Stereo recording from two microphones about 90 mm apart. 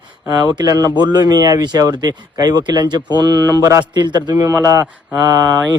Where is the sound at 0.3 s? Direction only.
45° right (ahead or behind).